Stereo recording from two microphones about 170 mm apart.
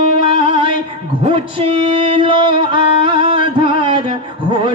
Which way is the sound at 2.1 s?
30° right (ahead or behind).